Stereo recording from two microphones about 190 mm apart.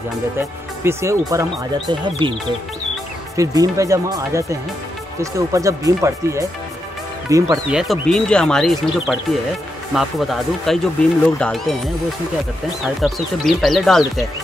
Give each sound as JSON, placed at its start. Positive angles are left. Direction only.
{"t": 0.4, "sound": "speech", "side_deg": -15}
{"t": 3.3, "sound": "speech", "side_deg": -15}
{"t": 7.7, "sound": "speech", "side_deg": 0}
{"t": 12.8, "sound": "speech", "side_deg": 0}